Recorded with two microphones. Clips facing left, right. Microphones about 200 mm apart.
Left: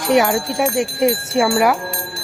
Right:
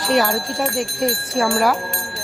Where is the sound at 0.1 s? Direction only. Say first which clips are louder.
Left 4 dB; 20° left (ahead or behind).